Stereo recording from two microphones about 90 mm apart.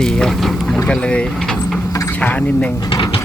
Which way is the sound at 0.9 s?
10° left (ahead or behind).